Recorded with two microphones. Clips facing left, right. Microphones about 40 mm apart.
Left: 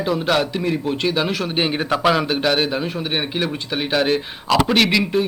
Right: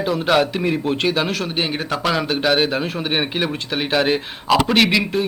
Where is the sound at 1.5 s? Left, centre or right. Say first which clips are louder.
Left 2 dB; centre.